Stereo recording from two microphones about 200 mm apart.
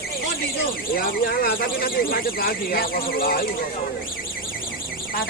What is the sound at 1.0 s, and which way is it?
Speech, 45° left (ahead or behind).